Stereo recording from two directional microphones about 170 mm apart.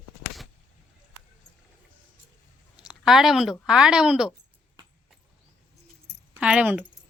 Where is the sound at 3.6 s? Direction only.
5° right (ahead or behind).